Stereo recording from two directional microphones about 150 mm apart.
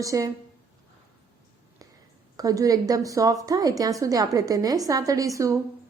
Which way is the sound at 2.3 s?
25° right (ahead or behind).